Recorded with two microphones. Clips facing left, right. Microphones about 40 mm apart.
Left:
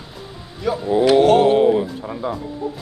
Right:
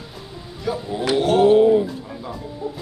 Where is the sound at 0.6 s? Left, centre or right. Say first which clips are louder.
Left 3 dB; centre.